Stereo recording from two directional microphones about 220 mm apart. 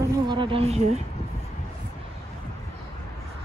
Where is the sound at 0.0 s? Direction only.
20° right (ahead or behind).